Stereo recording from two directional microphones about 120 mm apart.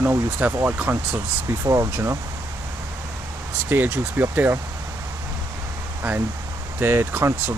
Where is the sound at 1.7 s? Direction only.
25° right (ahead or behind).